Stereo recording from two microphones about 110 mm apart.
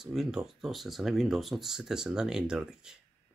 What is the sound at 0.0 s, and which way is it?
Speech, 5° right (ahead or behind).